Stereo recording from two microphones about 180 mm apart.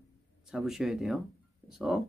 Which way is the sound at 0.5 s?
Centre (ahead or behind).